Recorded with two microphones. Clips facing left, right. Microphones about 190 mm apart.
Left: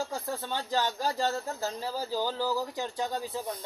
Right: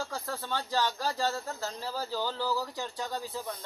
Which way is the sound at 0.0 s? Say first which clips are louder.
Left 3 dB; 20° left (ahead or behind).